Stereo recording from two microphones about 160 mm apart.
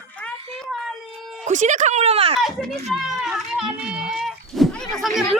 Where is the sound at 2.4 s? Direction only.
Centre (ahead or behind).